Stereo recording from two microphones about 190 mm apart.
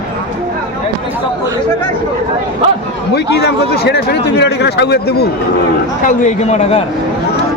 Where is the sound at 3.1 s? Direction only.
60° left (ahead or behind).